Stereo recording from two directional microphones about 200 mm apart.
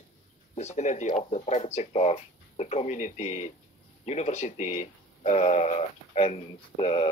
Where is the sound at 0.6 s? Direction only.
35° left (ahead or behind).